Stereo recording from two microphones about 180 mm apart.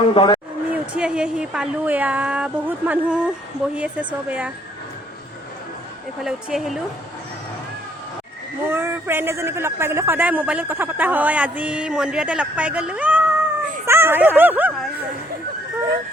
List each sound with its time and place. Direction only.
0.1 s speech: 25° left (ahead or behind)
0.7 s speech: 5° right (ahead or behind)
6.2 s a woman's voice: centre (ahead or behind)
8.7 s speech: 15° right (ahead or behind)